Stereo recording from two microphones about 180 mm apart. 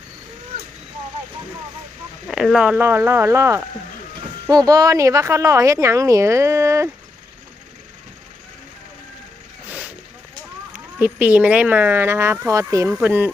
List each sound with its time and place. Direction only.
2.2 s speech: centre (ahead or behind)
11.0 s speech: 10° right (ahead or behind)